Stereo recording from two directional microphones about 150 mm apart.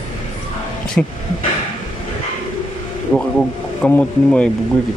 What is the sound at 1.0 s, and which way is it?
Speech, 10° left (ahead or behind).